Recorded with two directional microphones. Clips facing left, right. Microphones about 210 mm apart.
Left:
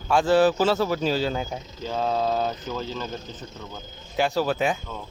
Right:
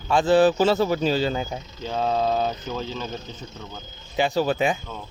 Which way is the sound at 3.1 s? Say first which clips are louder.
Even; 45° left (ahead or behind).